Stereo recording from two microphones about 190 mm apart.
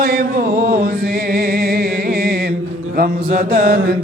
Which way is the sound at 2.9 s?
50° right (ahead or behind).